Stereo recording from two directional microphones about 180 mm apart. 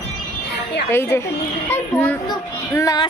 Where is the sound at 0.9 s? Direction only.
15° left (ahead or behind).